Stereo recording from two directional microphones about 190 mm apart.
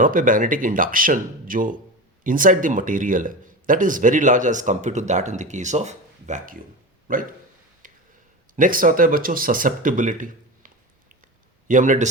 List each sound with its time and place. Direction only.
0.0 s speech: 45° right (ahead or behind)
7.8 s a sound: 45° right (ahead or behind)
8.5 s speech: 45° right (ahead or behind)
11.7 s speech: 45° right (ahead or behind)